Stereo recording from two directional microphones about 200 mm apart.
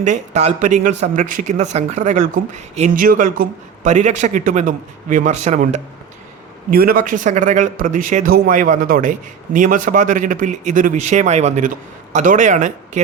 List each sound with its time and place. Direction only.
0.0 s a man's voice: 35° right (ahead or behind)
6.7 s a man's voice: 45° right (ahead or behind)